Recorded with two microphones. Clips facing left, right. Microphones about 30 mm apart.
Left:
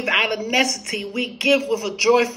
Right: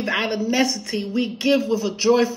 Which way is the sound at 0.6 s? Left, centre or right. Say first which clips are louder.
Left 1 dB; left.